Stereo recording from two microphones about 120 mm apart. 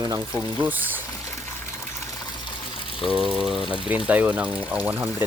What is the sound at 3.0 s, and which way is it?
Speech, 5° right (ahead or behind).